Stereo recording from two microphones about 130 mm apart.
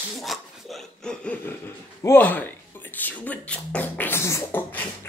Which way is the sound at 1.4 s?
20° left (ahead or behind).